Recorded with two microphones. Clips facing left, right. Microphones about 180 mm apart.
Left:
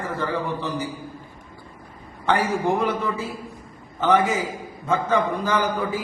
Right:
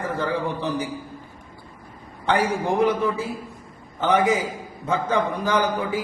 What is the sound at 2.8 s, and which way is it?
A man's voice, 15° right (ahead or behind).